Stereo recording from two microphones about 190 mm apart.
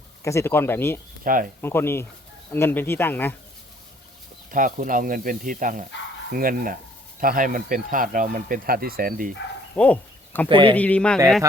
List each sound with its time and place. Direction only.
0.3 s speech: 15° left (ahead or behind)
1.2 s speech: 45° right (ahead or behind)
1.6 s speech: 10° left (ahead or behind)
4.5 s speech: 45° right (ahead or behind)
9.7 s speech: 5° left (ahead or behind)
10.5 s speech: 30° right (ahead or behind)
10.8 s speech: 5° left (ahead or behind)